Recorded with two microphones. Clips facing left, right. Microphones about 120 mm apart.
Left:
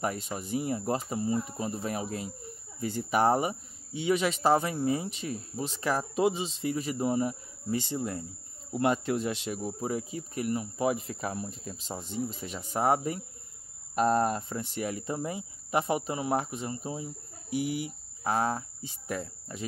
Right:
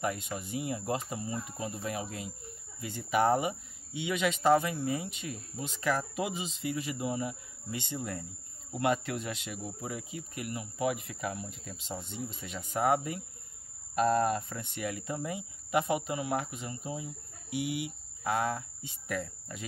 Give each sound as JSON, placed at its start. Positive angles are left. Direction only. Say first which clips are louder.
{"t": 0.0, "sound": "speech", "louder": "left 1 dB", "side_deg": 35}